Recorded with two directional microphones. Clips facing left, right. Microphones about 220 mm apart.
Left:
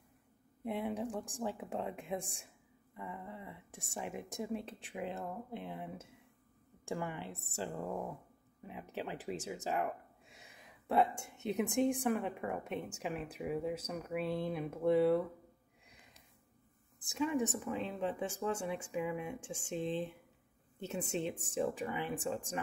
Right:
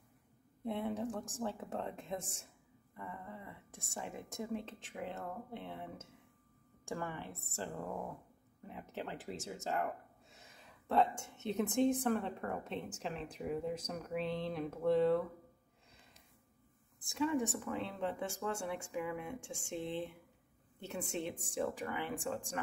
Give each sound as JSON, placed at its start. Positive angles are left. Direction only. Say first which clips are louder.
{"t": 0.7, "sound": "a woman's voice", "louder": "even", "side_deg": 15}
{"t": 6.9, "sound": "a woman's voice", "louder": "left 2 dB", "side_deg": 15}
{"t": 17.0, "sound": "a woman's voice", "louder": "even", "side_deg": 15}